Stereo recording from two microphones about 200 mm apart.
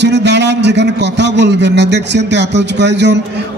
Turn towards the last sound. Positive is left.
turn(degrees=-60)  # may be behind; listen again after turning